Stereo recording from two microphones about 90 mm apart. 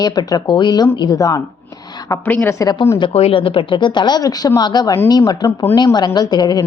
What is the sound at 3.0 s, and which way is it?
A woman's voice, 85° left.